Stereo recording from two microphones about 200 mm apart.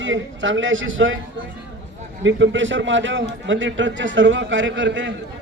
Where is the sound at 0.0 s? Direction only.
70° right (ahead or behind).